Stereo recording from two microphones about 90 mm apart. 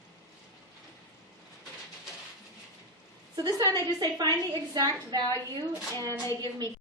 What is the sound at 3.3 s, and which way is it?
A woman's voice, 45° right (ahead or behind).